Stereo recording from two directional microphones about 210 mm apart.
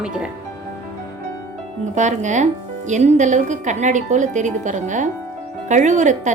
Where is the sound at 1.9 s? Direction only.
35° right (ahead or behind).